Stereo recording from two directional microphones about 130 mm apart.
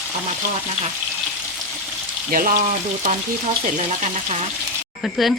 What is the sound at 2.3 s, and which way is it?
Frying, 90° right.